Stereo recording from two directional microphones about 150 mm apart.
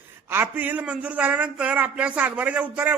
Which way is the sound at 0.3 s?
15° right (ahead or behind).